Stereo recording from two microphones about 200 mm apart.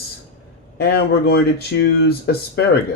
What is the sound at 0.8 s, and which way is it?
Speech, 50° left (ahead or behind).